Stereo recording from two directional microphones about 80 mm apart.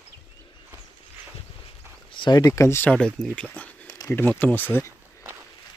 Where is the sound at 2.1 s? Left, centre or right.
Left.